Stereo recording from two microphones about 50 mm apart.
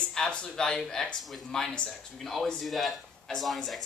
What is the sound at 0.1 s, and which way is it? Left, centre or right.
Speech, centre.